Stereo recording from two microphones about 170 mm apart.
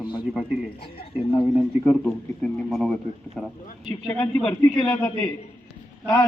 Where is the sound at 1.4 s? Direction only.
5° left (ahead or behind).